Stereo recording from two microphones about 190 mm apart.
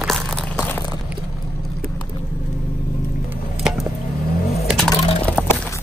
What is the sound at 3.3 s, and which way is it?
Chop, 5° right (ahead or behind).